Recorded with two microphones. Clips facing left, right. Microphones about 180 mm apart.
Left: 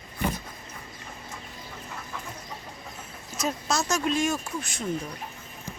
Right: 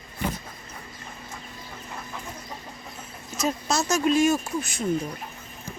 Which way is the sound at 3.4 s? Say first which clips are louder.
Right 2 dB; centre (ahead or behind).